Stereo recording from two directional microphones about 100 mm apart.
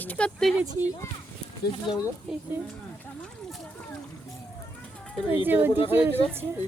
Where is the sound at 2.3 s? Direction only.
Centre (ahead or behind).